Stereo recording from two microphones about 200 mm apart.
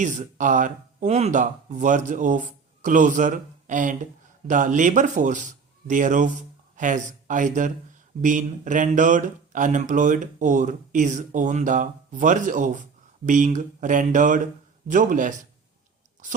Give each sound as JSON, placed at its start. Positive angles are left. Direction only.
{"t": 0.0, "sound": "speech", "side_deg": -40}